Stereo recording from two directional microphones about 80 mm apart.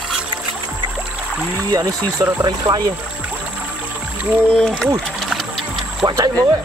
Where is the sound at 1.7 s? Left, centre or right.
Right.